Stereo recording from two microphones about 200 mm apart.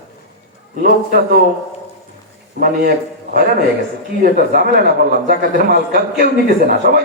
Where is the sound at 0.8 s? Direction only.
50° right (ahead or behind).